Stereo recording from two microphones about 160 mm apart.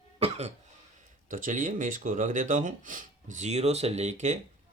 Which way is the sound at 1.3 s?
55° right (ahead or behind).